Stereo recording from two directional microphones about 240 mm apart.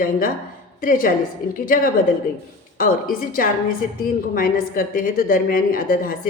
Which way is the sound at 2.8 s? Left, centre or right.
Left.